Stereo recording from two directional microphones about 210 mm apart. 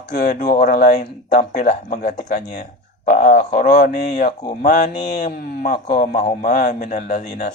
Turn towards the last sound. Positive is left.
turn(degrees=35)  # may be behind; listen again after turning